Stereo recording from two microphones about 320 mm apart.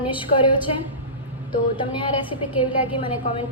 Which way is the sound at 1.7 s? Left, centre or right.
Centre.